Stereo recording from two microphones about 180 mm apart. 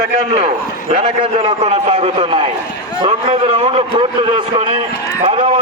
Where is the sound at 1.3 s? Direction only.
30° right (ahead or behind).